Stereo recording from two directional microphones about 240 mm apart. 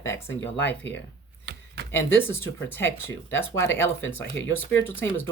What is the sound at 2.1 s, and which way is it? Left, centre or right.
Speech, centre.